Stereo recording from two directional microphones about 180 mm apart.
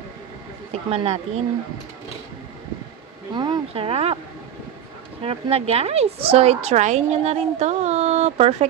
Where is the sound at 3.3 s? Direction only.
25° right (ahead or behind).